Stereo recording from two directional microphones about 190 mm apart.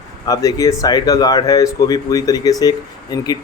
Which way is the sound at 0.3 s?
15° left (ahead or behind).